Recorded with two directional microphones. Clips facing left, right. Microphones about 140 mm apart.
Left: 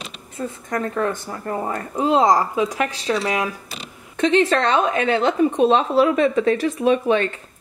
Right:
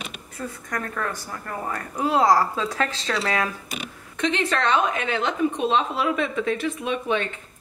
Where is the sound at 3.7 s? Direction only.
30° left (ahead or behind).